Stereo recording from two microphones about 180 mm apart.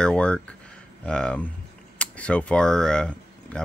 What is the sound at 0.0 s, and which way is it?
Speech, 5° left (ahead or behind).